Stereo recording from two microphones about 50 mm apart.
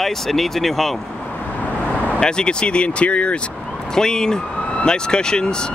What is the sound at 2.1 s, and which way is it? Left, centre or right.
Speech, centre.